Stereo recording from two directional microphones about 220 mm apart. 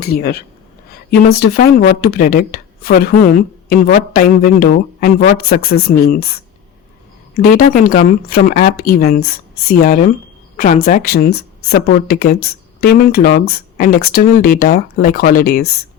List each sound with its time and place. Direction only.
0.0 s speech: 45° left (ahead or behind)
7.3 s speech: 40° left (ahead or behind)